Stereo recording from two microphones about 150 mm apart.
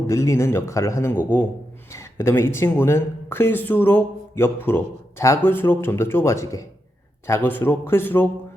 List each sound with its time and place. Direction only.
0.1 s a man's voice: 20° left (ahead or behind)